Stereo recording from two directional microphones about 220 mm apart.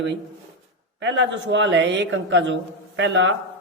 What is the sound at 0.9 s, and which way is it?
A woman's voice, 55° right (ahead or behind).